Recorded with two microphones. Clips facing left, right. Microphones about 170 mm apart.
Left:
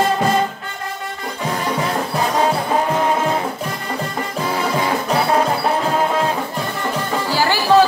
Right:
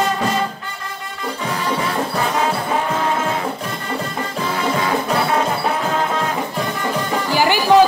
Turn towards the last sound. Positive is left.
turn(degrees=-15)  # may be behind; listen again after turning